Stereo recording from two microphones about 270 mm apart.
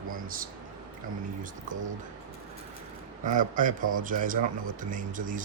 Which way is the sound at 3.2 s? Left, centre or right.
Right.